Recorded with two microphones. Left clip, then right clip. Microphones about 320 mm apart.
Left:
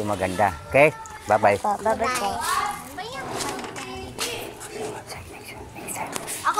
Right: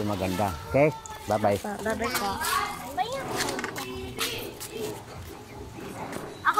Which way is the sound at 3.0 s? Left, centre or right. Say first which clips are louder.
Right 5 dB; centre.